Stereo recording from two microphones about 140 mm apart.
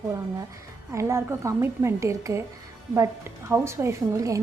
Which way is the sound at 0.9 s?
20° right (ahead or behind).